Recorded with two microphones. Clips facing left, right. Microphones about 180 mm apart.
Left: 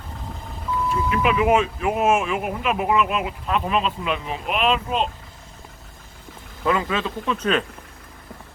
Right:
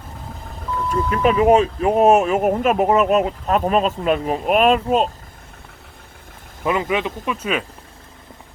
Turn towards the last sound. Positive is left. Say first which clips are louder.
# left 1 dB
turn(degrees=-10)  # may be behind; listen again after turning